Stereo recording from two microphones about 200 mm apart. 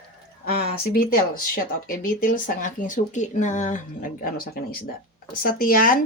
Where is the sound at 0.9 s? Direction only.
45° left (ahead or behind).